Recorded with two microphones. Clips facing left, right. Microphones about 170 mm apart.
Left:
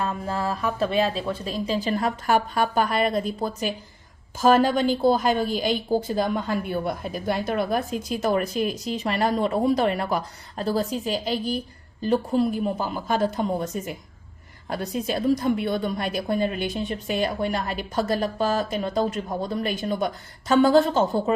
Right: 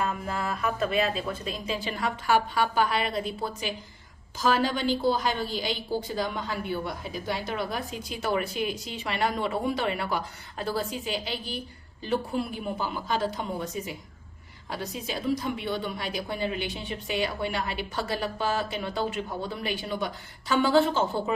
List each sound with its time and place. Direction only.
0.3 s a woman's voice: 30° left (ahead or behind)